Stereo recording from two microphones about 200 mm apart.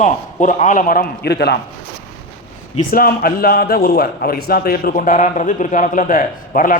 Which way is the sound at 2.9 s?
45° left (ahead or behind).